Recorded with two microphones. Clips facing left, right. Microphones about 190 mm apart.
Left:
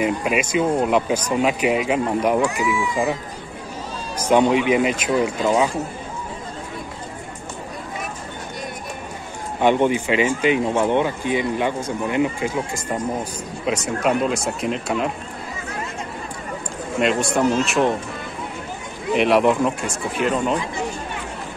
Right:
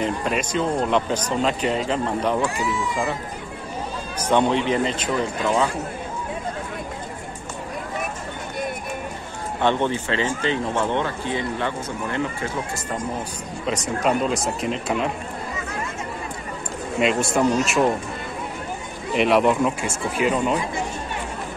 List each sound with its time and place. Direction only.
0.0 s speech: 10° left (ahead or behind)
4.3 s speech: 10° left (ahead or behind)
9.6 s speech: 10° left (ahead or behind)
17.0 s speech: centre (ahead or behind)
19.1 s speech: centre (ahead or behind)